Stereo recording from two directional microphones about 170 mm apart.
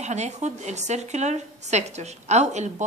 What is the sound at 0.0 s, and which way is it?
A woman's voice, 40° right (ahead or behind).